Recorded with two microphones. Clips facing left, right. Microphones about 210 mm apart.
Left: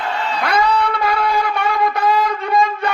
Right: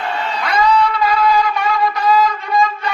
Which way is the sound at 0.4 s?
60° left (ahead or behind).